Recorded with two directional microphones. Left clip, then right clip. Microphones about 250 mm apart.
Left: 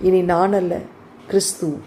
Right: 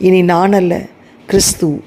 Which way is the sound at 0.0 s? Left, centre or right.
Right.